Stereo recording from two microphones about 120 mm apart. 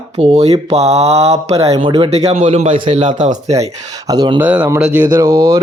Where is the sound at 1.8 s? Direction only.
45° right (ahead or behind).